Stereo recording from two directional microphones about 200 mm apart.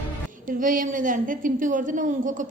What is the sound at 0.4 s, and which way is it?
A woman's voice, 40° right (ahead or behind).